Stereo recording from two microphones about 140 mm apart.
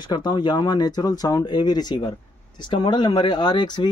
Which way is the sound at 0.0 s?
30° left (ahead or behind).